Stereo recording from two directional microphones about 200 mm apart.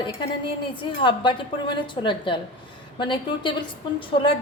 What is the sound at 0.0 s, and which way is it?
A woman's voice, 25° left (ahead or behind).